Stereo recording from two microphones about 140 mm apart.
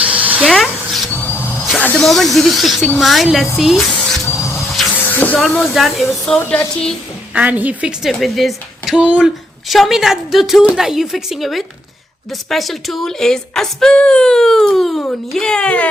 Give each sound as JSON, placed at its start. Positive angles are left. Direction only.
{"t": 0.0, "sound": "a sound", "side_deg": -10}
{"t": 0.5, "sound": "a sound", "side_deg": 0}
{"t": 1.1, "sound": "a sound", "side_deg": 15}
{"t": 1.8, "sound": "snake", "side_deg": 10}
{"t": 2.0, "sound": "speech", "side_deg": 0}
{"t": 5.0, "sound": "hiss", "side_deg": 10}
{"t": 5.4, "sound": "speech", "side_deg": 0}
{"t": 6.4, "sound": "speech", "side_deg": 15}
{"t": 7.3, "sound": "speech", "side_deg": -10}